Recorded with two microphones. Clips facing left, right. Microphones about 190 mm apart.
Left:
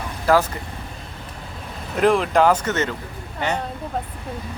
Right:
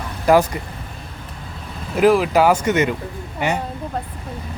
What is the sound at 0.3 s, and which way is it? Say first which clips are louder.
Speech: right 3 dB; 15° right (ahead or behind).